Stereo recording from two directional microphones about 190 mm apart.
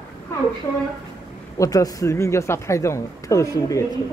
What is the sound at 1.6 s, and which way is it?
Speech, 20° left (ahead or behind).